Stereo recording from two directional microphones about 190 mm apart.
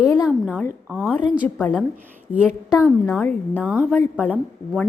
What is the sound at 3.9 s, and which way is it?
Speech, 5° left (ahead or behind).